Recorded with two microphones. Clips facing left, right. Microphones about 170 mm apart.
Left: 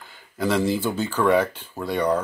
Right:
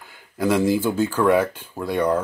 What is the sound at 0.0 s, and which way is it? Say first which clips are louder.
Speech: right 2 dB; 10° right (ahead or behind).